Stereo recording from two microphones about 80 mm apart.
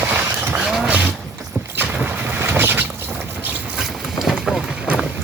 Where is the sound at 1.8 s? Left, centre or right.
Right.